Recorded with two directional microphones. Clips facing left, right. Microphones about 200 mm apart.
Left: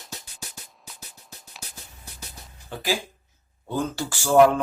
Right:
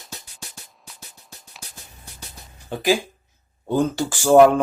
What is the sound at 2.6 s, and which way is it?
Speech, 20° right (ahead or behind).